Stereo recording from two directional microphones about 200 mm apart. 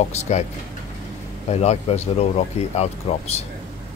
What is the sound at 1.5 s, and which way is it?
Speech, 35° left (ahead or behind).